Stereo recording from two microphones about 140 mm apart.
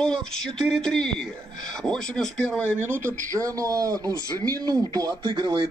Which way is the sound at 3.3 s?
25° right (ahead or behind).